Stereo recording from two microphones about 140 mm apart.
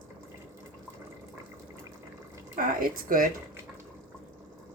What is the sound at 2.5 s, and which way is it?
Speech, 80° right.